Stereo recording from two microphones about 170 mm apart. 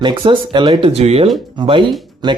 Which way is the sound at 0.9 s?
35° right (ahead or behind).